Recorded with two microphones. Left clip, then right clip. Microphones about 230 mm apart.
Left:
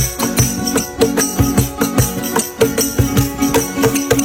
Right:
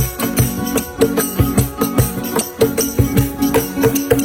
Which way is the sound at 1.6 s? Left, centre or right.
Centre.